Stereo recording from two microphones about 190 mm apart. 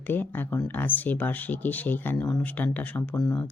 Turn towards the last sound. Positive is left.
turn(degrees=5)  # may be behind; listen again after turning